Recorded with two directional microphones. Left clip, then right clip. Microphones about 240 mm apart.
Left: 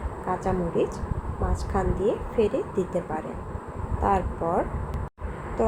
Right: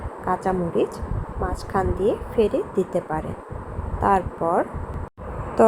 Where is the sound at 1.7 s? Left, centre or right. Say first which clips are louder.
Right 3 dB; centre.